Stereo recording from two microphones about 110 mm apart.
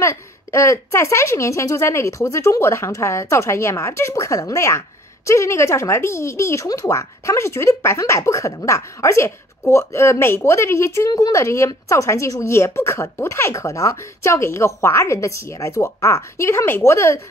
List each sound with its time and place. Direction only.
0.0 s a woman's voice: 25° left (ahead or behind)